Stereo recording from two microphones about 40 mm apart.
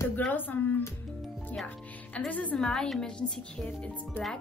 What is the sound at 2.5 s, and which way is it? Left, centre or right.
Speech, centre.